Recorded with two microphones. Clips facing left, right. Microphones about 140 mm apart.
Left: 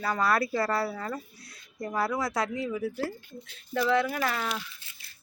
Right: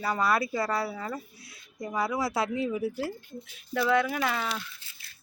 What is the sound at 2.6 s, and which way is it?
Speech, 20° right (ahead or behind).